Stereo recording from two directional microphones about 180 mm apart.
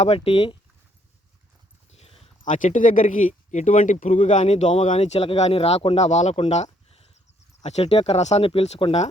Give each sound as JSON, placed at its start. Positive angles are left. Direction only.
{"t": 0.0, "sound": "speech", "side_deg": 35}
{"t": 1.9, "sound": "a sound", "side_deg": 35}
{"t": 2.4, "sound": "speech", "side_deg": 45}